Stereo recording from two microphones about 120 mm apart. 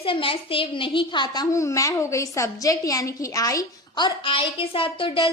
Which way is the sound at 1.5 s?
25° left (ahead or behind).